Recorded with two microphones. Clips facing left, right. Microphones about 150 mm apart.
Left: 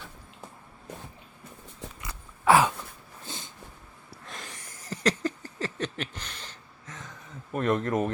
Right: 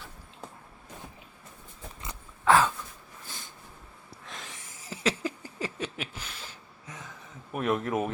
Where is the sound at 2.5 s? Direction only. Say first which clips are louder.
Left 2 dB; 10° left (ahead or behind).